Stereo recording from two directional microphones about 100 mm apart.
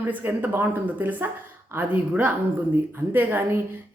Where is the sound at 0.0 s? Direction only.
20° right (ahead or behind).